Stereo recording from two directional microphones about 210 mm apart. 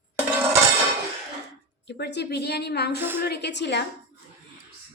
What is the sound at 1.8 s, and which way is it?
A woman's voice, 55° left (ahead or behind).